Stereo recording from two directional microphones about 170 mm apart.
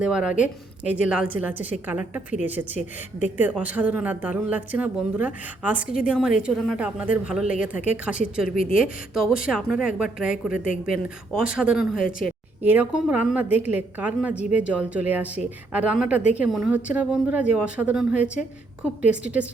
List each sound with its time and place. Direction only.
0.0 s a woman's voice: 5° right (ahead or behind)
8.4 s a woman's voice: 55° left (ahead or behind)
8.8 s a woman's voice: centre (ahead or behind)